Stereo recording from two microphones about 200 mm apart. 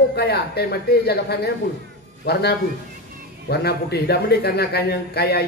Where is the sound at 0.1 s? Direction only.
55° left (ahead or behind).